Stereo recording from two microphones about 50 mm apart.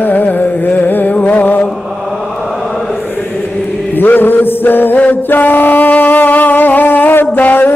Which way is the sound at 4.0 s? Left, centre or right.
Left.